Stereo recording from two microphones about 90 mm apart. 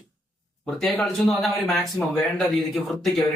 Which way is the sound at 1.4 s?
Centre (ahead or behind).